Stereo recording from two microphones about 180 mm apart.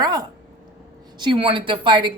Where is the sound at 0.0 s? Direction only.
20° right (ahead or behind).